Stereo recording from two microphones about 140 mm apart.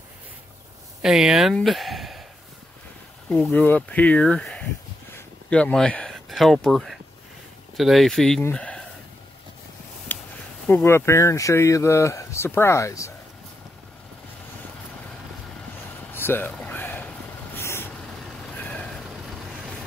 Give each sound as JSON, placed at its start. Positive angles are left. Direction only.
{"t": 1.0, "sound": "speech", "side_deg": -5}
{"t": 3.3, "sound": "speech", "side_deg": 15}
{"t": 10.1, "sound": "a sound", "side_deg": 10}
{"t": 10.7, "sound": "speech", "side_deg": 15}
{"t": 16.1, "sound": "a sound", "side_deg": 15}
{"t": 17.6, "sound": "vehicle", "side_deg": 15}